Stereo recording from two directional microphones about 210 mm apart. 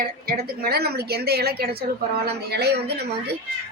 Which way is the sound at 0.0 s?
45° right (ahead or behind).